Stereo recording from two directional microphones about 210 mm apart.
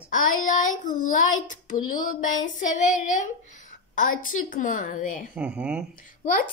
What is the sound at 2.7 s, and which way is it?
A woman's voice, 35° left (ahead or behind).